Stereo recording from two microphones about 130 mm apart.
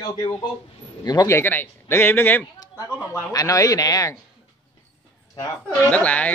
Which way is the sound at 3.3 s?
25° left (ahead or behind).